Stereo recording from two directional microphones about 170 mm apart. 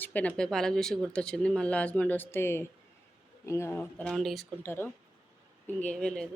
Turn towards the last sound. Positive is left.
turn(degrees=5)  # may be behind; listen again after turning